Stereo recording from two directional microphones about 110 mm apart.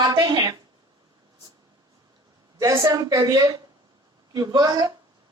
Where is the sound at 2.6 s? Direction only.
30° right (ahead or behind).